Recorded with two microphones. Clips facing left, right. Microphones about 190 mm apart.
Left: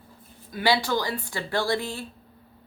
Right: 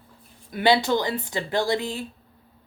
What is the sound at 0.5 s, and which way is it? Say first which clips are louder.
Speech: right 4 dB; 20° right (ahead or behind).